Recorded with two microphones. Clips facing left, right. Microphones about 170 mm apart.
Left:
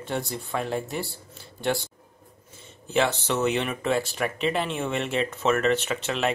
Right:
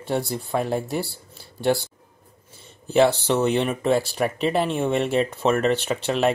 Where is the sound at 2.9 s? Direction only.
35° right (ahead or behind).